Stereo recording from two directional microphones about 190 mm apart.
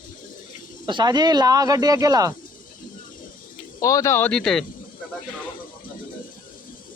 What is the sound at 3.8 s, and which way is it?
Speech, 15° left (ahead or behind).